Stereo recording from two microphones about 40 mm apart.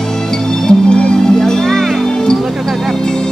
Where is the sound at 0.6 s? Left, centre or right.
Left.